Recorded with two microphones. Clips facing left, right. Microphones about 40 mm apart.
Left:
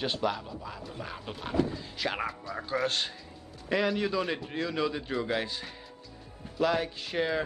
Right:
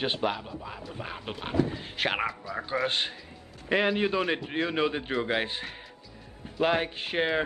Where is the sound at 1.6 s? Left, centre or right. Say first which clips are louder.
Right 2 dB; right.